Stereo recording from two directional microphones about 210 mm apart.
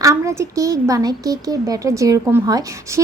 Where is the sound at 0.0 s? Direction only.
15° right (ahead or behind).